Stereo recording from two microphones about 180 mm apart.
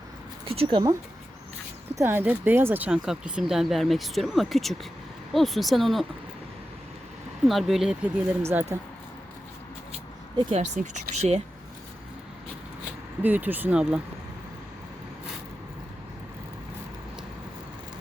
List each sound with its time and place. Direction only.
0.4 s speech: 30° right (ahead or behind)
2.0 s speech: 10° right (ahead or behind)
7.4 s speech: centre (ahead or behind)
8.4 s speech: 15° right (ahead or behind)
10.3 s speech: 35° right (ahead or behind)
13.2 s speech: 10° right (ahead or behind)